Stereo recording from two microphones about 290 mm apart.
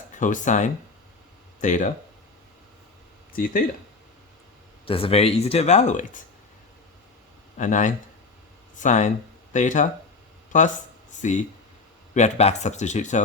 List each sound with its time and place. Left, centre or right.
0.1 s speech: left
4.9 s speech: centre
7.6 s speech: left